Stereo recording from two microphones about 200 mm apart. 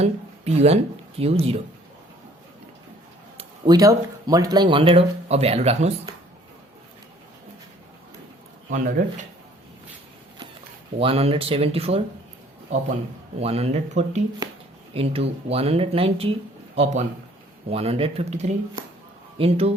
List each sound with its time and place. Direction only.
0.0 s speech: 30° right (ahead or behind)
3.3 s speech: 20° right (ahead or behind)
8.7 s speech: 40° right (ahead or behind)
11.0 s speech: 30° right (ahead or behind)
13.4 s speech: 30° right (ahead or behind)